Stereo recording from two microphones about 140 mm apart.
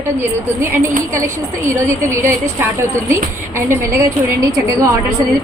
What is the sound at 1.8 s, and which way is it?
Speech, 20° right (ahead or behind).